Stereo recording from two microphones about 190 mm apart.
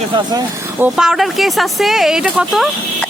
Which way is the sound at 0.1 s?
25° right (ahead or behind).